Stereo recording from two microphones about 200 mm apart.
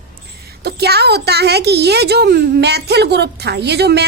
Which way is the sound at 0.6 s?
55° right (ahead or behind).